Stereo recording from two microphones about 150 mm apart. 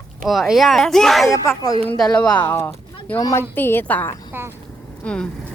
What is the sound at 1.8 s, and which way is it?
A woman's voice, 5° left (ahead or behind).